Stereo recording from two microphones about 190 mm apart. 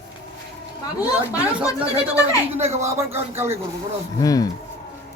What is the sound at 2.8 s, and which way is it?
Speech, 15° right (ahead or behind).